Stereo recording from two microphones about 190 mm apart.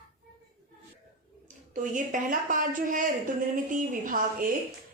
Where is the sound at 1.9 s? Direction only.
45° right (ahead or behind).